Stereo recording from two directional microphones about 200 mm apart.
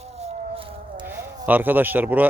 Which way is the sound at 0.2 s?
30° right (ahead or behind).